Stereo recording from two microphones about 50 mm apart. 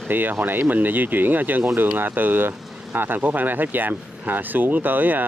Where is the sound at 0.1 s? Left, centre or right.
Right.